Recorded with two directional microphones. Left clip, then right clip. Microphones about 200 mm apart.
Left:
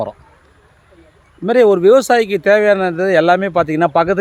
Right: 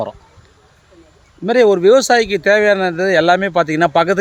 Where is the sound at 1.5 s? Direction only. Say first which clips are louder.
Left 1 dB; 5° left (ahead or behind).